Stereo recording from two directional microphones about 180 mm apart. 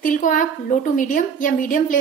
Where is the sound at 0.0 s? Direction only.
45° left (ahead or behind).